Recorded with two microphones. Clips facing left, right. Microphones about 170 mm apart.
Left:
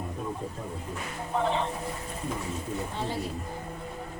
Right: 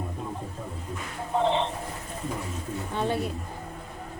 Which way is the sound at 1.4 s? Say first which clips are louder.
Right 3 dB; 25° right (ahead or behind).